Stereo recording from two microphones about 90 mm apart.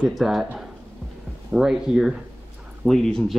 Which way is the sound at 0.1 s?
5° right (ahead or behind).